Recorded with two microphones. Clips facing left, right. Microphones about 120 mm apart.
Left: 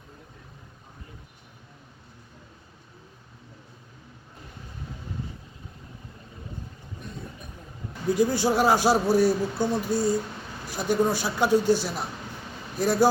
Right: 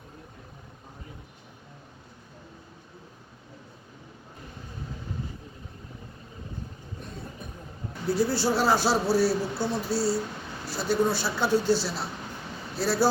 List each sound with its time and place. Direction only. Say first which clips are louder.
8.0 s speech: left 2 dB; 15° left (ahead or behind)